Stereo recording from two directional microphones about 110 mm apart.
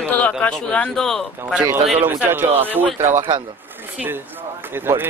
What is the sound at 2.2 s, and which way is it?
Speech, 20° right (ahead or behind).